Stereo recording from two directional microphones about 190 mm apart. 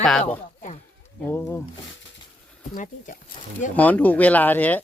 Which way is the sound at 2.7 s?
45° left (ahead or behind).